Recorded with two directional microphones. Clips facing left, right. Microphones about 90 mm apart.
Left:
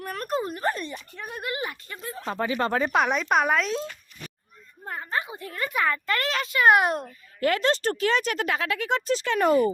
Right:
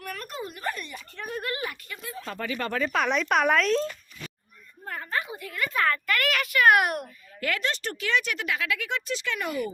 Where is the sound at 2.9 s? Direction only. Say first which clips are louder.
Left 2 dB; 15° left (ahead or behind).